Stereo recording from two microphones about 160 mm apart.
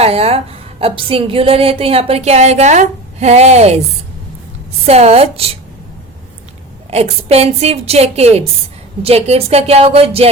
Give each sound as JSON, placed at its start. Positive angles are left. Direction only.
{"t": 0.0, "sound": "a woman's voice", "side_deg": -40}
{"t": 4.9, "sound": "a woman's voice", "side_deg": -40}
{"t": 6.9, "sound": "a woman's voice", "side_deg": -40}